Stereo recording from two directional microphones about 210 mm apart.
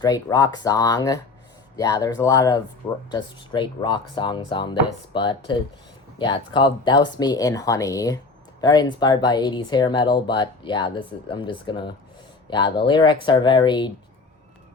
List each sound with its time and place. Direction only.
0.0 s speech: 20° left (ahead or behind)